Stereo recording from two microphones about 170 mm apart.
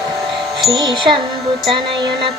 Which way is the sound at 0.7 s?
25° right (ahead or behind).